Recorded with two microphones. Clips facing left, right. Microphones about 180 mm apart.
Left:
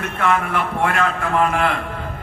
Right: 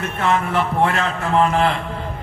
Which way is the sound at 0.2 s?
30° right (ahead or behind).